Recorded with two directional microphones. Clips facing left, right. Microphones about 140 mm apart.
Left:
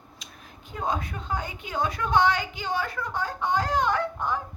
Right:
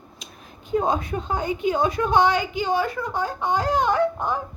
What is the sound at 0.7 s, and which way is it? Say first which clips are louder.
Speech: right 8 dB; 25° right (ahead or behind).